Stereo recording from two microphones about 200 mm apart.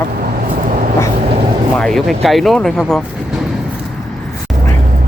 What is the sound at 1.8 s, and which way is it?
Speech, centre (ahead or behind).